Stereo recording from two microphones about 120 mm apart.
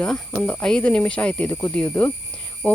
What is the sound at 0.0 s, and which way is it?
Speech, 10° left (ahead or behind).